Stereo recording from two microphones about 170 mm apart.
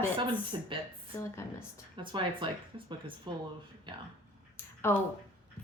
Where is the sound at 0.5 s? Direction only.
30° right (ahead or behind).